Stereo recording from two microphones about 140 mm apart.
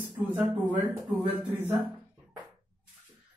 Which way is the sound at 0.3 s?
15° right (ahead or behind).